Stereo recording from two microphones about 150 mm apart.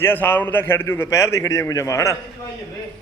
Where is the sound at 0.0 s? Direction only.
15° left (ahead or behind).